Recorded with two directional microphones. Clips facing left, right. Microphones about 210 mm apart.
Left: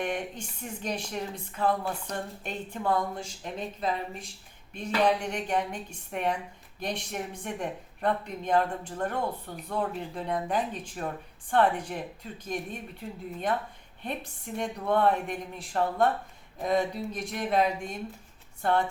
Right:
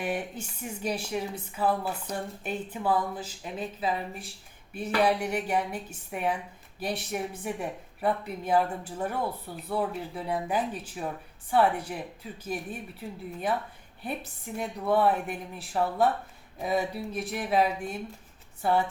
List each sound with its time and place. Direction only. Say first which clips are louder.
0.0 s a woman's voice: even; 5° right (ahead or behind)